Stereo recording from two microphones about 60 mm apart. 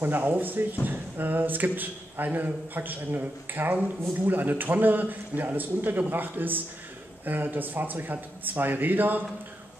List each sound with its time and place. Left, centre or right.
0.0 s a man's voice: right